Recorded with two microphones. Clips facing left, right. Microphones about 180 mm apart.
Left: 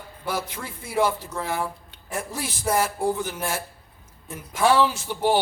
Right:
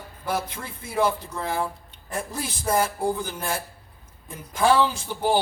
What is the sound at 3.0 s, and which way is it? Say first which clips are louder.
Speech: left 1 dB; 5° left (ahead or behind).